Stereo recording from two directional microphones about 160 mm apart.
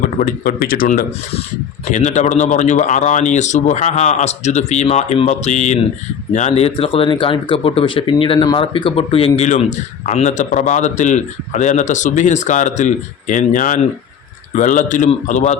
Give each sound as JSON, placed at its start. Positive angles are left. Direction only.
{"t": 0.2, "sound": "speech", "side_deg": 55}
{"t": 1.9, "sound": "speech", "side_deg": 50}